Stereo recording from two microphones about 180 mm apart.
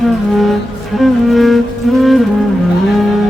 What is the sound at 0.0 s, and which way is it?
Music, centre (ahead or behind).